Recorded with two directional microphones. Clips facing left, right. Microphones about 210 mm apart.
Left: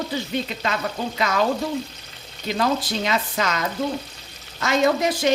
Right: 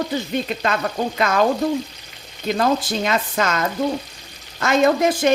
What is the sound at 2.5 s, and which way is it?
Speech, 50° right (ahead or behind).